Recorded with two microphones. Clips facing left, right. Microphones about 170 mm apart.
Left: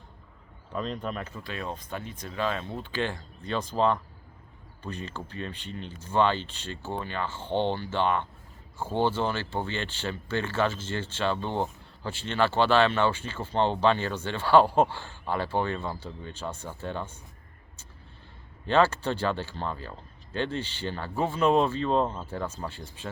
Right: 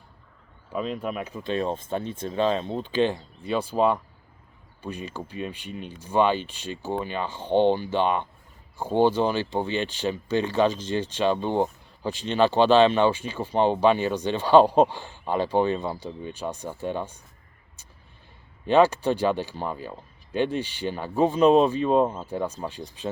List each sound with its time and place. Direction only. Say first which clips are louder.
0.7 s speech: right 3 dB; 5° right (ahead or behind)
18.6 s speech: right 4 dB; 15° right (ahead or behind)